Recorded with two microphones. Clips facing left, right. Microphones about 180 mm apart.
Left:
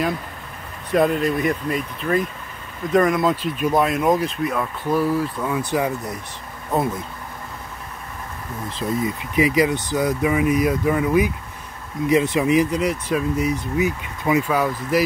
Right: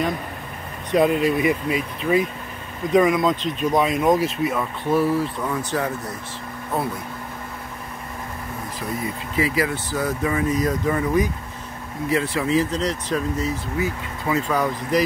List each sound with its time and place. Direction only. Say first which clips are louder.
0.9 s speech: even; centre (ahead or behind); by 6.1 s 15° left (ahead or behind)
8.7 s speech: left 6 dB; 20° left (ahead or behind)
12.1 s speech: left 4 dB; 20° left (ahead or behind)